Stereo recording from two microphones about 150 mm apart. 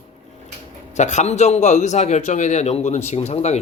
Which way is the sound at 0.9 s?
50° left (ahead or behind).